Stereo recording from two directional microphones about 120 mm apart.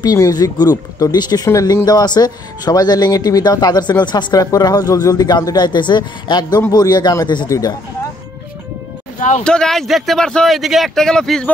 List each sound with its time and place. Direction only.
0.0 s speech: 30° left (ahead or behind)
9.4 s speech: 5° left (ahead or behind)